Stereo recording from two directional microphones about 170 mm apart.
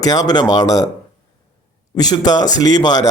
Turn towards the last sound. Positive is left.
turn(degrees=25)  # may be behind; listen again after turning